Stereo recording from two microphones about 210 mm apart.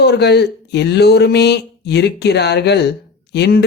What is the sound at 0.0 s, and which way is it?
Speech, 50° left (ahead or behind).